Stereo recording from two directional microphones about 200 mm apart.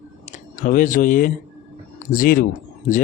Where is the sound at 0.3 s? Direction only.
40° left (ahead or behind).